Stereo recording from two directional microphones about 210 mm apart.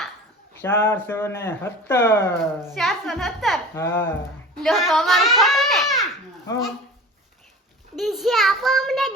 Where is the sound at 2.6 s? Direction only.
Centre (ahead or behind).